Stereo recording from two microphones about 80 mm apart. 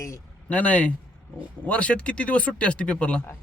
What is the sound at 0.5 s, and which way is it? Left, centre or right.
Speech, centre.